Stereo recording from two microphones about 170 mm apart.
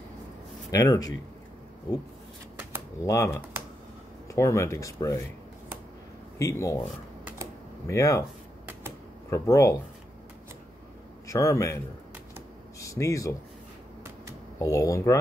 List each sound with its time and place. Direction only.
0.7 s speech: 20° left (ahead or behind)
3.1 s speech: 15° left (ahead or behind)
6.3 s speech: 20° left (ahead or behind)
7.8 s speech: 15° left (ahead or behind)
9.3 s speech: 15° left (ahead or behind)
11.2 s speech: 15° left (ahead or behind)
12.8 s speech: 20° left (ahead or behind)
14.6 s speech: 20° left (ahead or behind)